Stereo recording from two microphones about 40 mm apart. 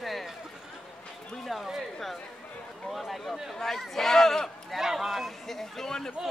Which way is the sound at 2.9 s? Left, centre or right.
Centre.